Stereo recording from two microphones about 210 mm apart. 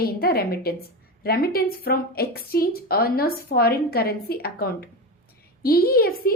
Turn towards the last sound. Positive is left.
turn(degrees=45)  # may be behind; listen again after turning